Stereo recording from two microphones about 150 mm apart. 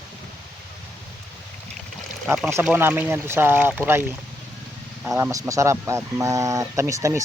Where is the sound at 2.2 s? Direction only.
Centre (ahead or behind).